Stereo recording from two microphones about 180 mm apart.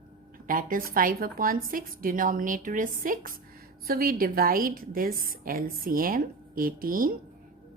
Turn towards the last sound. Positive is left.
turn(degrees=-50)  # may be behind; listen again after turning